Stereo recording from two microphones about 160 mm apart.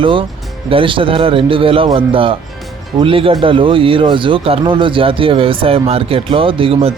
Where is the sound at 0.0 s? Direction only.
35° right (ahead or behind).